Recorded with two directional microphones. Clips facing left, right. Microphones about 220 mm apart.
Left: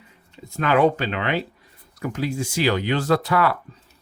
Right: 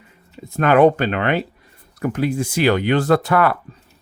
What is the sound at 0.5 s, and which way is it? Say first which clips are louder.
Speech: right 5 dB; 55° right (ahead or behind).